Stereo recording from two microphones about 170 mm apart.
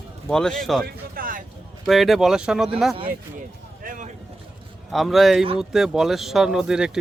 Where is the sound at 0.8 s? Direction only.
55° right (ahead or behind).